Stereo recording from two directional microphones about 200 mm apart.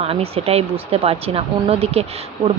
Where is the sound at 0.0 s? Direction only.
30° right (ahead or behind).